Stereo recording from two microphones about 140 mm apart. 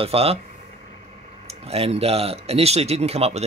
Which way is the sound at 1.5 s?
45° right (ahead or behind).